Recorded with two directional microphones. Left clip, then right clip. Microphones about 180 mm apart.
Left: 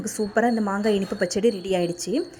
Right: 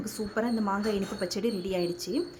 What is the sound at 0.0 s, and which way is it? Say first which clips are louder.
A woman's voice: left 9 dB; 20° left (ahead or behind).